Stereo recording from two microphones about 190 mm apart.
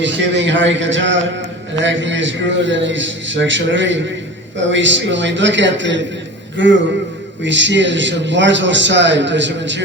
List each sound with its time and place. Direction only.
0.0 s a man's voice: 70° right (ahead or behind)